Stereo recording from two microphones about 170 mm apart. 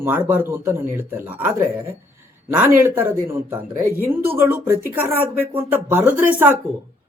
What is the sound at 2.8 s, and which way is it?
Speech, 10° right (ahead or behind).